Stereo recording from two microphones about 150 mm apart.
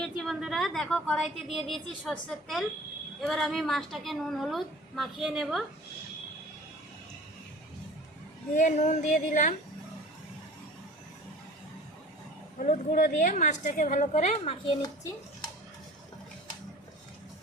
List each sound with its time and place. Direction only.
0.0 s a woman's voice: centre (ahead or behind)
8.5 s a woman's voice: 55° left (ahead or behind)
12.5 s a woman's voice: 55° left (ahead or behind)